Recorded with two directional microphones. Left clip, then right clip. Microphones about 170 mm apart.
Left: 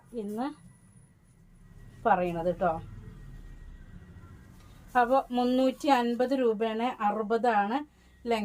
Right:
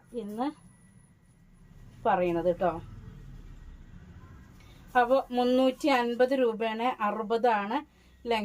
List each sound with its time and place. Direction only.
0.1 s speech: 15° right (ahead or behind)
2.0 s speech: 15° right (ahead or behind)
4.9 s speech: 15° right (ahead or behind)